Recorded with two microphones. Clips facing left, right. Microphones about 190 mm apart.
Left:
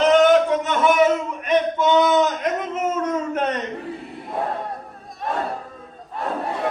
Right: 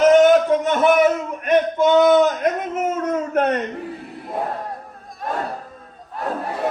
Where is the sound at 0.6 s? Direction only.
50° right (ahead or behind).